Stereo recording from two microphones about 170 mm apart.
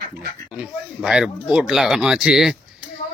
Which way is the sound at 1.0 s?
5° right (ahead or behind).